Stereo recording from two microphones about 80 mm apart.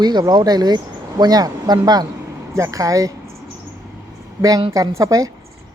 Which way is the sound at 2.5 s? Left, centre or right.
Right.